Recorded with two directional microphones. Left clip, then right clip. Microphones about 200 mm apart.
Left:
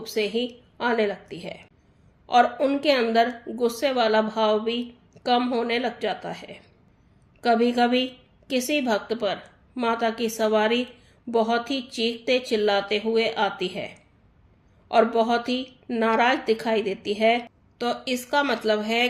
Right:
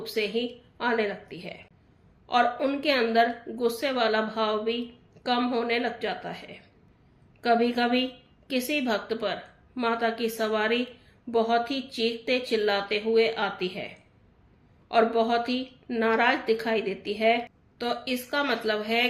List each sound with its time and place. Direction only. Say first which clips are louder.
0.0 s a woman's voice: left 3 dB; 50° left (ahead or behind)